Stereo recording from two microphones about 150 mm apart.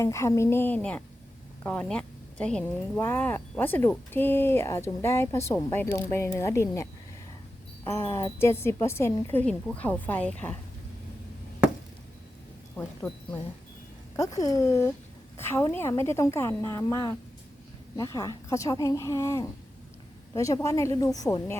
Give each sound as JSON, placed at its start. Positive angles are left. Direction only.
{"t": 0.0, "sound": "speech", "side_deg": 20}
{"t": 7.9, "sound": "speech", "side_deg": 15}
{"t": 12.7, "sound": "speech", "side_deg": 10}
{"t": 14.2, "sound": "speech", "side_deg": 20}